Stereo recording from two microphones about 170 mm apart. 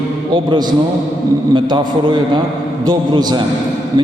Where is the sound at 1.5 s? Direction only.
25° right (ahead or behind).